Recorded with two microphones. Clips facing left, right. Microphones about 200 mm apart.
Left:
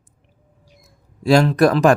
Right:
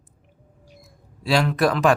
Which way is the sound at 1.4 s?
40° left (ahead or behind).